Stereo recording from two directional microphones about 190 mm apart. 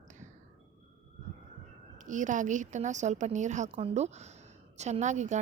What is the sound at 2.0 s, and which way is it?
A woman's voice, 40° right (ahead or behind).